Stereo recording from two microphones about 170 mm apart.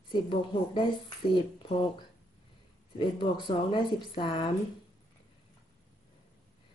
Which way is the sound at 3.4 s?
30° left (ahead or behind).